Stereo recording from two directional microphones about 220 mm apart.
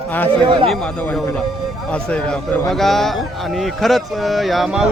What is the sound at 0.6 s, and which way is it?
Speech, 5° left (ahead or behind).